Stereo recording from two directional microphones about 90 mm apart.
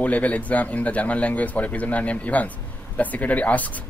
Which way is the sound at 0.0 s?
15° left (ahead or behind).